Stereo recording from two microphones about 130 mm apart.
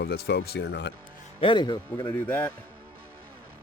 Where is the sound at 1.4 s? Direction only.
35° left (ahead or behind).